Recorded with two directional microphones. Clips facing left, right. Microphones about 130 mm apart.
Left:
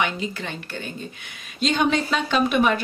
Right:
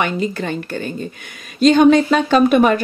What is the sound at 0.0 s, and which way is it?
Speech, 45° right (ahead or behind).